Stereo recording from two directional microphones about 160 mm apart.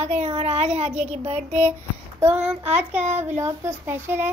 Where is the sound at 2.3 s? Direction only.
5° right (ahead or behind).